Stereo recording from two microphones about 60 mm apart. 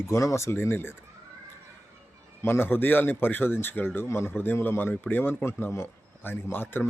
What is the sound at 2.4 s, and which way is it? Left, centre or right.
Speech, left.